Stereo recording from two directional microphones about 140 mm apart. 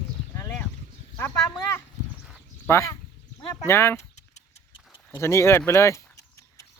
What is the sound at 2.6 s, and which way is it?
Speech, 20° left (ahead or behind).